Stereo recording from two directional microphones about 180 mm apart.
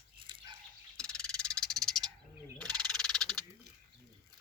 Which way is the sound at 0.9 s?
5° left (ahead or behind).